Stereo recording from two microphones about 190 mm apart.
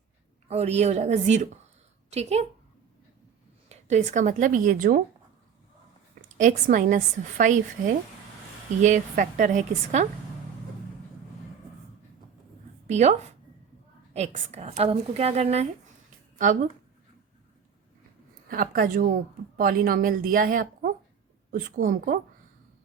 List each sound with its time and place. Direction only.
0.4 s a woman's voice: 35° right (ahead or behind)
3.7 s a woman's voice: 40° right (ahead or behind)
6.2 s a woman's voice: 40° right (ahead or behind)
12.9 s a woman's voice: 35° right (ahead or behind)
18.4 s a woman's voice: 50° right (ahead or behind)